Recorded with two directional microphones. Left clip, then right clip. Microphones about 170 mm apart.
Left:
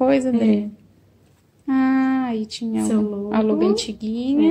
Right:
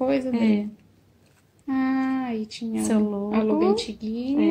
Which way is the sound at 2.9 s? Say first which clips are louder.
Left 1 dB; 40° right (ahead or behind).